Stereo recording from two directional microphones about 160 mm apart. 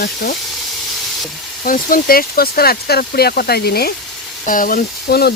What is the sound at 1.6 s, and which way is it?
Speech, 60° left (ahead or behind).